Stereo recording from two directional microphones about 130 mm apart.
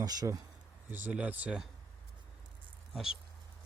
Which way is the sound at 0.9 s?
15° right (ahead or behind).